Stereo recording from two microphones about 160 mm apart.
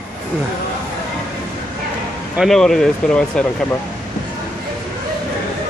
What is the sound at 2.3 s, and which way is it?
Speech, centre (ahead or behind).